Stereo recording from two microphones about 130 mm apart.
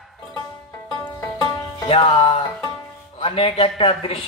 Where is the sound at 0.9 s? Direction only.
30° left (ahead or behind).